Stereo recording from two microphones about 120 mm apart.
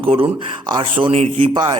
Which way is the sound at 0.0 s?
50° right (ahead or behind).